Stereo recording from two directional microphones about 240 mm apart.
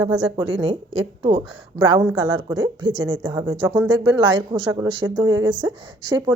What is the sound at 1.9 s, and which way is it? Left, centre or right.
A woman's voice, centre.